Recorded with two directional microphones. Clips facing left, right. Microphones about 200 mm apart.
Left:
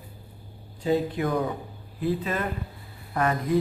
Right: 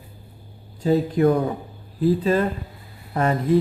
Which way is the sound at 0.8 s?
40° right (ahead or behind).